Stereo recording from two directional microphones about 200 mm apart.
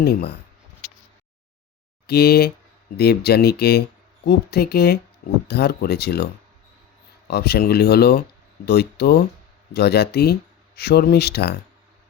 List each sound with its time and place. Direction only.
0.0 s speech: 55° left (ahead or behind)
2.0 s speech: 55° left (ahead or behind)
7.3 s speech: 55° left (ahead or behind)